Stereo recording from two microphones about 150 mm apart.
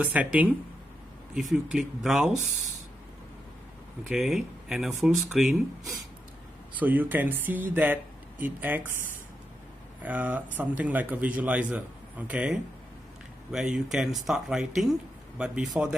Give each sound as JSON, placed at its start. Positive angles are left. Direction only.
{"t": 0.0, "sound": "speech", "side_deg": -10}
{"t": 4.1, "sound": "speech", "side_deg": -5}
{"t": 6.8, "sound": "speech", "side_deg": -10}
{"t": 10.0, "sound": "speech", "side_deg": -10}